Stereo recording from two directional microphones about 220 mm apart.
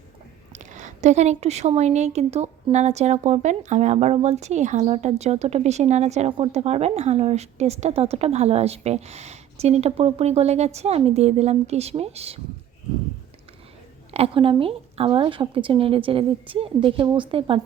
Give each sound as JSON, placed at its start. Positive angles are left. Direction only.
{"t": 0.5, "sound": "a woman's voice", "side_deg": -35}
{"t": 14.1, "sound": "a woman's voice", "side_deg": -25}